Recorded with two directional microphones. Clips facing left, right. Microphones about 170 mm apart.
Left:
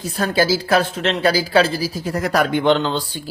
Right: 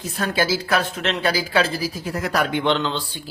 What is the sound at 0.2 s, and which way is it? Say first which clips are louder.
Speech: left 4 dB; 35° left (ahead or behind).